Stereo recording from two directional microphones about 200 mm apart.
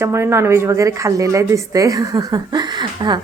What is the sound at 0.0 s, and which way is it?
Speech, 10° right (ahead or behind).